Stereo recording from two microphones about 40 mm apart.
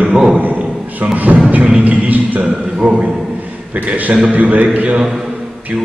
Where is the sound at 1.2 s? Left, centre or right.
Right.